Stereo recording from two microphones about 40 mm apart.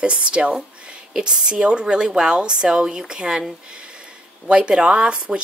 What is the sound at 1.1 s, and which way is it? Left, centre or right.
Speech, centre.